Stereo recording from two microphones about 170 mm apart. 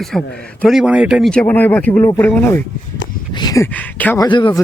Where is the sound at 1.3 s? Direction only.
10° left (ahead or behind).